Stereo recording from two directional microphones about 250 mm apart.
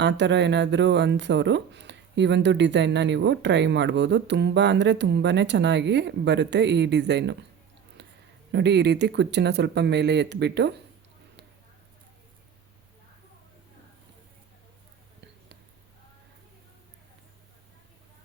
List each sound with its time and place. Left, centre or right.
0.0 s speech: right
8.0 s a sound: right
8.5 s speech: right